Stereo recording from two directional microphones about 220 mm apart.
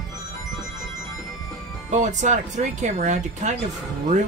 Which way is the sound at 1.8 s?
35° right (ahead or behind).